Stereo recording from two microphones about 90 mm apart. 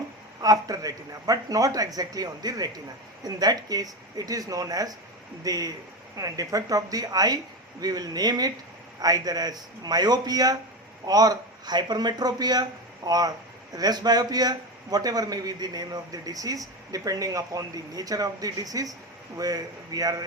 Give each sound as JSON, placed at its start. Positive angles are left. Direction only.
{"t": 0.4, "sound": "a man's voice", "side_deg": -40}